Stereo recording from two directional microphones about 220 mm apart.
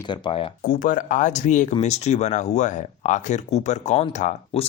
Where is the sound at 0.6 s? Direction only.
40° left (ahead or behind).